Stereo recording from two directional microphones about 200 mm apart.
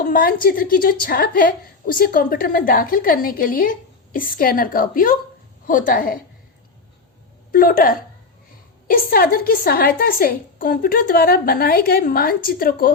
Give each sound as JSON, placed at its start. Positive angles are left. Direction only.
{"t": 0.0, "sound": "a woman's voice", "side_deg": 45}
{"t": 7.5, "sound": "a woman's voice", "side_deg": 45}